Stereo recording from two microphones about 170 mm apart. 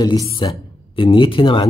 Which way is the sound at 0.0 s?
25° left (ahead or behind).